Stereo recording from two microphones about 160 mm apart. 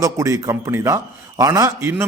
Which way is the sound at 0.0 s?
20° right (ahead or behind).